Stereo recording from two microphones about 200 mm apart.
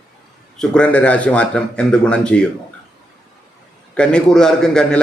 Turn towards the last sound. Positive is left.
turn(degrees=5)  # may be behind; listen again after turning